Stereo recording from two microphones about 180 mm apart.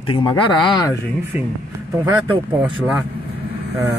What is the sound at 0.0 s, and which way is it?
Speech, 30° left (ahead or behind).